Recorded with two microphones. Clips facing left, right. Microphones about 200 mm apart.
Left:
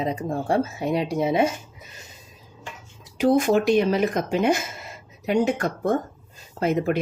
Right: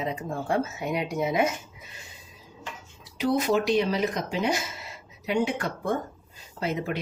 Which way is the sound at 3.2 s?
50° left (ahead or behind).